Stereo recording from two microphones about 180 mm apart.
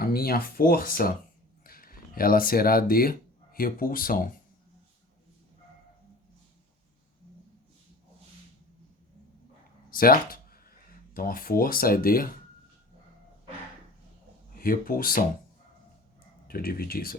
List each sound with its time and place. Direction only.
0.0 s speech: 55° left (ahead or behind)
9.9 s speech: 55° left (ahead or behind)
14.6 s speech: 55° left (ahead or behind)
16.5 s speech: 55° left (ahead or behind)